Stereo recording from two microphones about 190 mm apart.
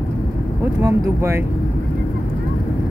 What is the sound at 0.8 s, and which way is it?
Speech, 15° right (ahead or behind).